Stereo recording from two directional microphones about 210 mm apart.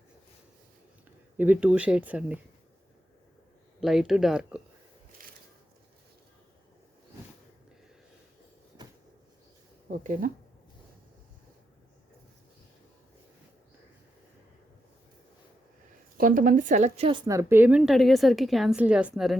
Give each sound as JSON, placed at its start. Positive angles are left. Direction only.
{"t": 1.4, "sound": "speech", "side_deg": -5}
{"t": 3.8, "sound": "a woman's voice", "side_deg": 0}
{"t": 5.2, "sound": "a sound", "side_deg": -40}
{"t": 9.9, "sound": "speech", "side_deg": -40}
{"t": 16.1, "sound": "a woman's voice", "side_deg": -40}